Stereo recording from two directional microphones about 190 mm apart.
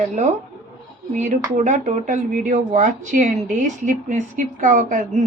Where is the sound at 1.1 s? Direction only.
40° right (ahead or behind).